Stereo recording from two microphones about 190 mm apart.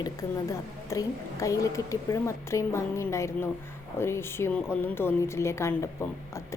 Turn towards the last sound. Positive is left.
turn(degrees=15)  # may be behind; listen again after turning